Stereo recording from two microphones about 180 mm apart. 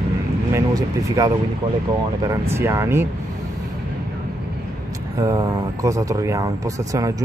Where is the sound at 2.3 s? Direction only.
15° right (ahead or behind).